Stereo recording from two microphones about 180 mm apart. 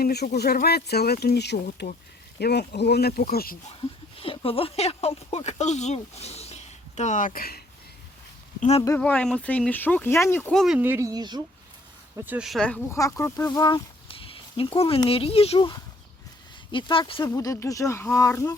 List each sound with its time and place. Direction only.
0.0 s speech: 65° left (ahead or behind)
3.8 s speech: 30° left (ahead or behind); by 7.6 s 55° left (ahead or behind)
9.0 s speech: 5° left (ahead or behind)
10.5 s speech: centre (ahead or behind)
10.8 s speech: 10° right (ahead or behind)
12.1 s speech: 10° right (ahead or behind); by 13.0 s 5° left (ahead or behind)
13.0 s speech: 15° left (ahead or behind)
17.2 s speech: 20° left (ahead or behind)